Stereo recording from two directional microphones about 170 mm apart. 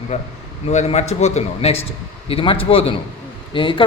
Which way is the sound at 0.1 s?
40° left (ahead or behind).